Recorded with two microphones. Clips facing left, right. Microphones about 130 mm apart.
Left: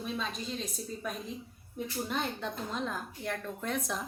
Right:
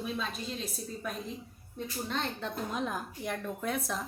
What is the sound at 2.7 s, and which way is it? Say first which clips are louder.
A woman's voice: right 1 dB; 10° right (ahead or behind).